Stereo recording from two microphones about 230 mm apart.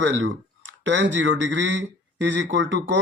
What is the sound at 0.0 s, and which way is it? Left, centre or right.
A man's voice, right.